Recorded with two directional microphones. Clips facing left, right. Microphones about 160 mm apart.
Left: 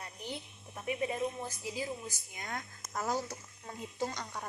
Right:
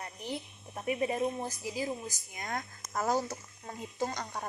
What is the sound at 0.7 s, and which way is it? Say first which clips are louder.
Speech: right 3 dB; 40° right (ahead or behind).